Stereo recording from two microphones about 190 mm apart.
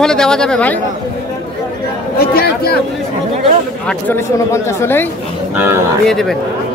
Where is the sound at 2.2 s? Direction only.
55° left (ahead or behind).